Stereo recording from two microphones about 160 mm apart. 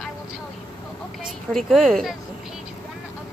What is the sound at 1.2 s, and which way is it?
Speech, centre (ahead or behind).